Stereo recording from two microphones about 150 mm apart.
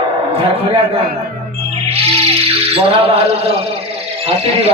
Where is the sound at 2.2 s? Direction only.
40° right (ahead or behind).